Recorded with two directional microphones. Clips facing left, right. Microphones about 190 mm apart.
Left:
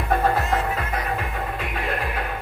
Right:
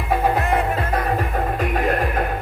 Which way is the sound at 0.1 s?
10° right (ahead or behind).